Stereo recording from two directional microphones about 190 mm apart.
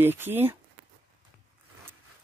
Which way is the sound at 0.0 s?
10° right (ahead or behind).